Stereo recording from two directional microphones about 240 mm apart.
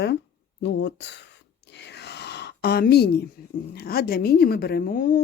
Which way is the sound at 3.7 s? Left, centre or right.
Left.